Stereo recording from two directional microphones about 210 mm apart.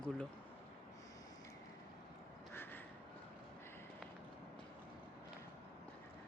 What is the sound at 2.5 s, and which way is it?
Crow, 10° left (ahead or behind).